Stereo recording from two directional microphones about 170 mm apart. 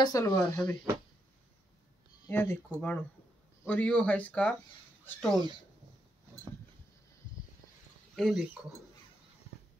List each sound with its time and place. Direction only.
0.0 s speech: 20° left (ahead or behind)
2.2 s speech: 15° left (ahead or behind)
8.2 s speech: centre (ahead or behind)